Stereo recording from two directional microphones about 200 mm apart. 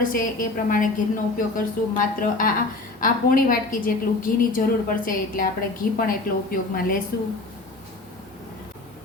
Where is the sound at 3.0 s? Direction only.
45° left (ahead or behind).